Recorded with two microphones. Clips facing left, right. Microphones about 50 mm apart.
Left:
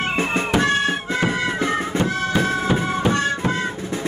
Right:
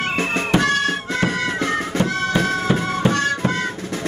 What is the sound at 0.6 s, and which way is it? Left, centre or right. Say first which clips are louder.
Music: even; centre.